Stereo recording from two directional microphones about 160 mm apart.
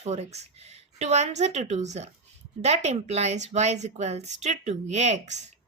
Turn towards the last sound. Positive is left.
turn(degrees=-45)  # may be behind; listen again after turning